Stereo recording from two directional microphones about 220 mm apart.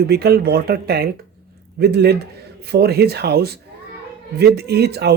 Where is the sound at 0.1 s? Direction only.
45° right (ahead or behind).